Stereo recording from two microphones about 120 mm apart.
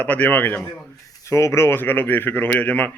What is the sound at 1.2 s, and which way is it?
Speech, 25° left (ahead or behind).